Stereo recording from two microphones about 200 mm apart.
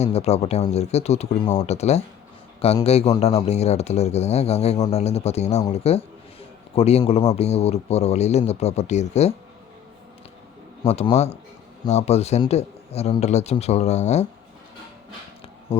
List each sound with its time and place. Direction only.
0.0 s a man's voice: 30° left (ahead or behind)
10.8 s speech: 30° left (ahead or behind)